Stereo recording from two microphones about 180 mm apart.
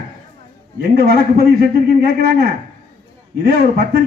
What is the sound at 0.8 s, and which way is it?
Speech, 60° right (ahead or behind).